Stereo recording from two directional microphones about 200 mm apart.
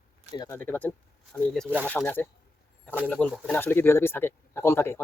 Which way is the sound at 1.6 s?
10° right (ahead or behind).